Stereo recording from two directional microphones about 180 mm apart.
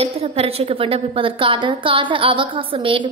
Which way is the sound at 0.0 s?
35° right (ahead or behind).